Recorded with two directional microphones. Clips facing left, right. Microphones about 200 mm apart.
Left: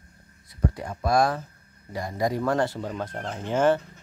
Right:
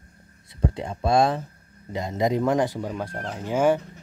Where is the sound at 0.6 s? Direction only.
25° right (ahead or behind).